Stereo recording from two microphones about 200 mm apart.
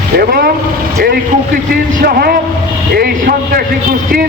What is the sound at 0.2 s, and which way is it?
Speech, 45° right (ahead or behind).